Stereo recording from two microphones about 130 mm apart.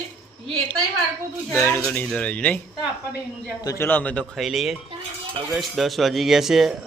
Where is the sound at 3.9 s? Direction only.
10° left (ahead or behind).